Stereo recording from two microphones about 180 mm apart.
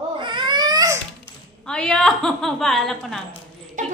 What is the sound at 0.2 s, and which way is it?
Baby cry, 25° right (ahead or behind).